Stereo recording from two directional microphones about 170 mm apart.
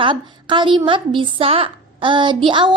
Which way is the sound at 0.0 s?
30° right (ahead or behind).